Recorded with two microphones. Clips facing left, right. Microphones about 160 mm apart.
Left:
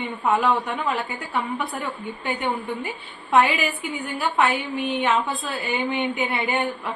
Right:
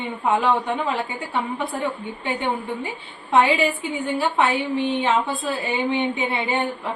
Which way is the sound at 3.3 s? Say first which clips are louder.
Right 2 dB; 30° right (ahead or behind).